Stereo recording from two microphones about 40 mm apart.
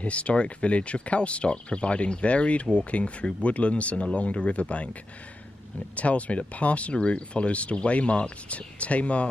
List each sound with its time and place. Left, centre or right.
0.0 s speech: left
5.9 s speech: left